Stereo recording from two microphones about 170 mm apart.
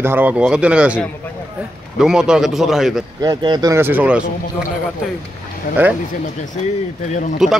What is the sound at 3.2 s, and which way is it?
Speech, 25° right (ahead or behind).